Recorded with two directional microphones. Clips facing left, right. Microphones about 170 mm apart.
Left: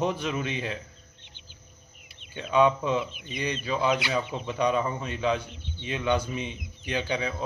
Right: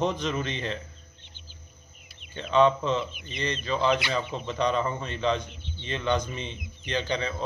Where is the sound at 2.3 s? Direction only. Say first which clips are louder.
Right 1 dB; 10° left (ahead or behind).